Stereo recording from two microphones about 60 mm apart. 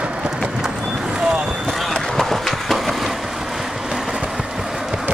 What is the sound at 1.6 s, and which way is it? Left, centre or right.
Skateboard, centre.